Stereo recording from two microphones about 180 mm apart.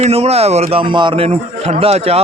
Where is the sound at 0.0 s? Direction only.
35° right (ahead or behind).